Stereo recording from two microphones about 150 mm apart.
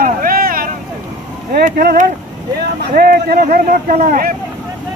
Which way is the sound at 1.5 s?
85° right.